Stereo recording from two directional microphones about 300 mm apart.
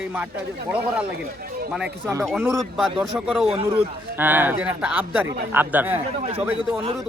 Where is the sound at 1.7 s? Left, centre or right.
Centre.